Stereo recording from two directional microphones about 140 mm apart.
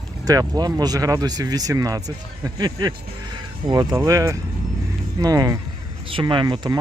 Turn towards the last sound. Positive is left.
turn(degrees=-30)  # may be behind; listen again after turning